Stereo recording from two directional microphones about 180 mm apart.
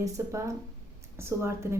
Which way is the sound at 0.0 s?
15° right (ahead or behind).